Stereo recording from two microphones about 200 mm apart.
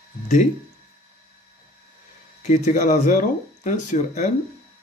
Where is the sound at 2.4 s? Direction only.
40° left (ahead or behind).